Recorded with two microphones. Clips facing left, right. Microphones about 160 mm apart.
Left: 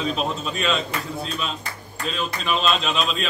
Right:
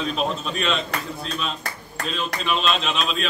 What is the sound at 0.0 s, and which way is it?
Speech, centre (ahead or behind).